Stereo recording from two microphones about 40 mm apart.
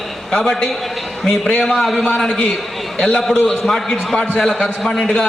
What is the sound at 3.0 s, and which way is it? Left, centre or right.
Speech, left.